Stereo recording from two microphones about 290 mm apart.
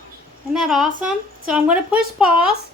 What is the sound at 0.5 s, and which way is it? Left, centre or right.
A woman's voice, centre.